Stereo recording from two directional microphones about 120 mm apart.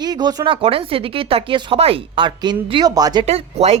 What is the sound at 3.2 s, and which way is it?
Speech, 65° right (ahead or behind).